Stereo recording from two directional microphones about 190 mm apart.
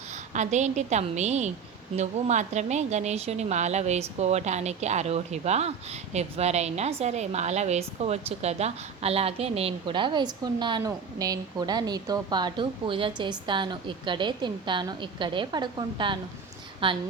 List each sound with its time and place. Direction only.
0.3 s a woman's voice: 40° right (ahead or behind)